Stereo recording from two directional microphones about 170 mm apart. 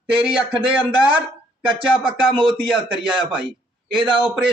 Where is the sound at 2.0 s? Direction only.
30° right (ahead or behind).